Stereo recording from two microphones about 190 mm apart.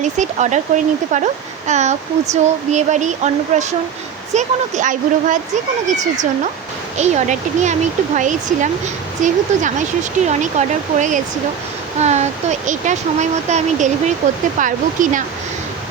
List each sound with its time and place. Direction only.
0.0 s speech: 40° right (ahead or behind)